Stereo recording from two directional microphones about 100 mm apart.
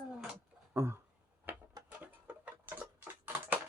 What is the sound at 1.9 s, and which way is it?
Tick-tock, 15° right (ahead or behind).